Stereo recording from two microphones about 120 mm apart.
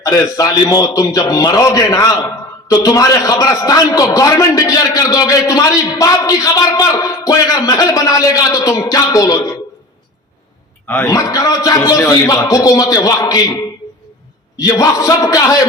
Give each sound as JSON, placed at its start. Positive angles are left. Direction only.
{"t": 0.0, "sound": "a man's voice", "side_deg": 30}
{"t": 10.8, "sound": "a man's voice", "side_deg": 15}
{"t": 11.1, "sound": "a man's voice", "side_deg": 30}